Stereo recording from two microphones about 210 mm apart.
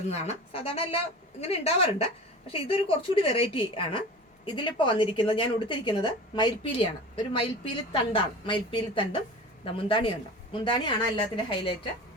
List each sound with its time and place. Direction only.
0.1 s a woman's voice: 30° left (ahead or behind)